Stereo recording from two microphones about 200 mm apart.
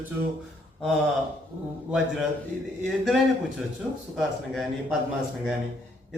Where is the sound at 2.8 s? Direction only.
Centre (ahead or behind).